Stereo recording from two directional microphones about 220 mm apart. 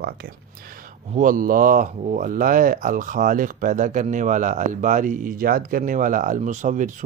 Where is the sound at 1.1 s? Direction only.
40° right (ahead or behind).